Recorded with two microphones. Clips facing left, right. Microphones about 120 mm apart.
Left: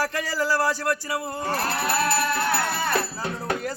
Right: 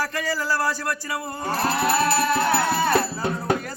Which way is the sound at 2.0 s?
30° right (ahead or behind).